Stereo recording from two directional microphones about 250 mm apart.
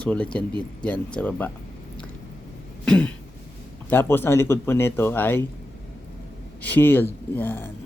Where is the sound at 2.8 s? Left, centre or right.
Centre.